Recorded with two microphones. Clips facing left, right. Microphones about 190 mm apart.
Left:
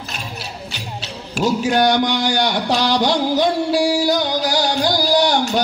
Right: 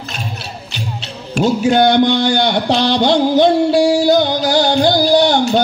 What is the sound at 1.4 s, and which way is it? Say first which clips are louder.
Speech: right 4 dB; 25° right (ahead or behind).